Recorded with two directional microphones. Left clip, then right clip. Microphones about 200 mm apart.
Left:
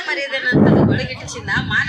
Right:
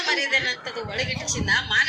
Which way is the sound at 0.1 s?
45° right (ahead or behind).